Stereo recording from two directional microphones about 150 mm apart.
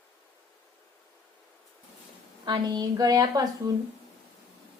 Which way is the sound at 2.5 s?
30° right (ahead or behind).